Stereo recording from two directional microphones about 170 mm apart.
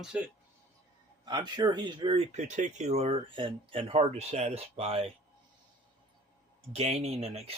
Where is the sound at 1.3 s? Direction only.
25° right (ahead or behind).